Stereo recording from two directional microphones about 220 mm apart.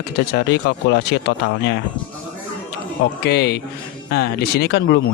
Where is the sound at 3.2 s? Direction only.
50° left (ahead or behind).